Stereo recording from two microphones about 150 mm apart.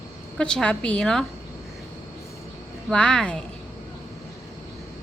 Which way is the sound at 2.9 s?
5° left (ahead or behind).